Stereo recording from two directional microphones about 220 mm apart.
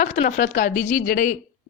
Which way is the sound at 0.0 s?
35° left (ahead or behind).